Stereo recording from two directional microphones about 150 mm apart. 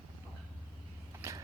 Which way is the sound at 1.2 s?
20° right (ahead or behind).